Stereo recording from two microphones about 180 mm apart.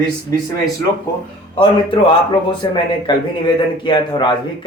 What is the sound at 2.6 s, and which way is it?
Speech, 25° left (ahead or behind).